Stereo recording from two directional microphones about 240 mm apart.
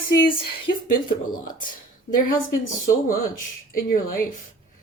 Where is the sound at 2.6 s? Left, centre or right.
Left.